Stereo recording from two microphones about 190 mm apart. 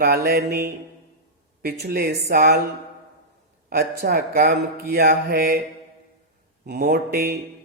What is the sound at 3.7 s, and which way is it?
Speech, 55° right (ahead or behind).